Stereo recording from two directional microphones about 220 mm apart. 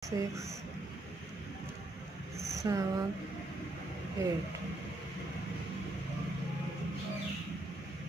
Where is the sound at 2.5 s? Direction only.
15° right (ahead or behind).